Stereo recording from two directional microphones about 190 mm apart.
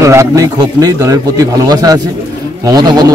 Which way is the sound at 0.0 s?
15° right (ahead or behind).